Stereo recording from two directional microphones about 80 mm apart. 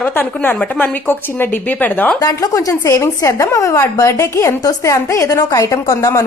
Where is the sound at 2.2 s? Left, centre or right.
Left.